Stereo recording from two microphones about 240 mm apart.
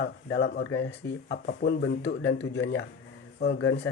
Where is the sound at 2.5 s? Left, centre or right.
Left.